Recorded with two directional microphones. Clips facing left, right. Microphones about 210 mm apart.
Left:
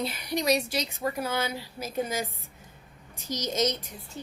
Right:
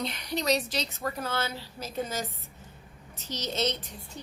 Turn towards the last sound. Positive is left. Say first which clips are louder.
# left 3 dB
turn(degrees=10)  # may be behind; listen again after turning